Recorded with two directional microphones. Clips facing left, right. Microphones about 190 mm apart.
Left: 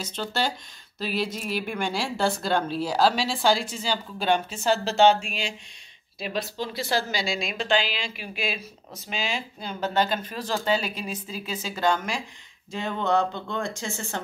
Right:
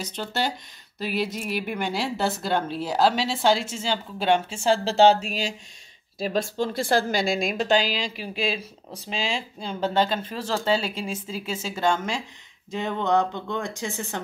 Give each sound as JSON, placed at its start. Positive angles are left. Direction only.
{"t": 0.0, "sound": "speech", "side_deg": -15}